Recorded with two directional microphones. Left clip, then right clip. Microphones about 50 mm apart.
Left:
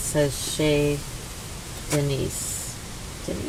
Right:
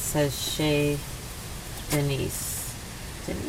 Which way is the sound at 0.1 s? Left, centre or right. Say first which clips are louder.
Left 3 dB; centre.